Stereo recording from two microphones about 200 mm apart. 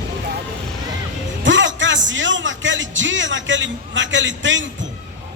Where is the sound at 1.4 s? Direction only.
65° right (ahead or behind).